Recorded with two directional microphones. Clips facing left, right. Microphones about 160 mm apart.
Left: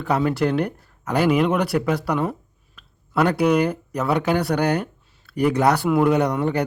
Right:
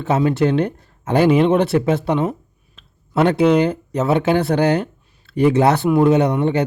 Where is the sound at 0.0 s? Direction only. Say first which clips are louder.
Right 4 dB; 20° right (ahead or behind).